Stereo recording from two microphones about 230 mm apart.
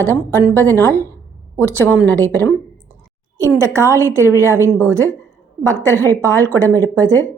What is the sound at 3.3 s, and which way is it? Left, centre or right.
A woman's voice, centre.